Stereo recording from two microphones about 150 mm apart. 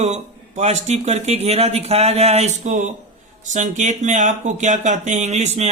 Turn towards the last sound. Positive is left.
turn(degrees=-50)  # may be behind; listen again after turning